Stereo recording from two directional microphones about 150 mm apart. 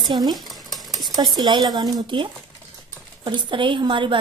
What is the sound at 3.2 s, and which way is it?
Speech, 30° right (ahead or behind).